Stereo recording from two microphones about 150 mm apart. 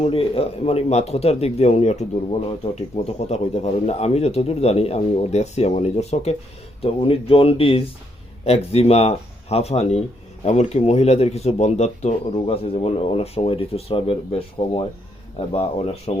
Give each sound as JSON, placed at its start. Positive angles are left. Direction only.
{"t": 0.0, "sound": "speech", "side_deg": 40}